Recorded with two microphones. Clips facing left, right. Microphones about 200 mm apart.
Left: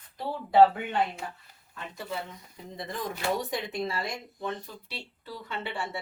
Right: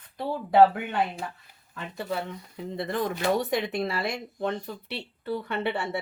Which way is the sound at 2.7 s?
65° right (ahead or behind).